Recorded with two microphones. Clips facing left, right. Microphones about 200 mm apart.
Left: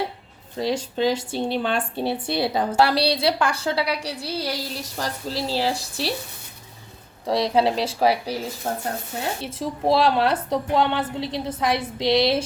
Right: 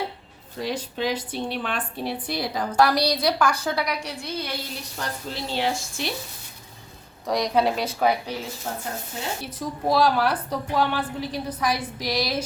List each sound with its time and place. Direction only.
0.6 s speech: 30° left (ahead or behind)
7.3 s speech: 30° left (ahead or behind)
8.7 s speech: 50° left (ahead or behind)
9.4 s speech: 25° left (ahead or behind)